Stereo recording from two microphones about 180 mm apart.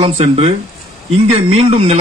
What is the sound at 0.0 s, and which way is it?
Speech, 35° right (ahead or behind).